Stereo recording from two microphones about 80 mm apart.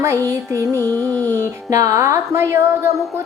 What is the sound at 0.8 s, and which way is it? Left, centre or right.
Music, left.